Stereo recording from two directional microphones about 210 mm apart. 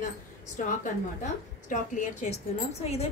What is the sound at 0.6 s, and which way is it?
A woman's voice, 40° left (ahead or behind).